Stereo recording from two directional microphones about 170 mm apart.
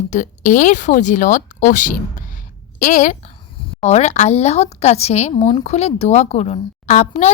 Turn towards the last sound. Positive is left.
turn(degrees=40)  # may be behind; listen again after turning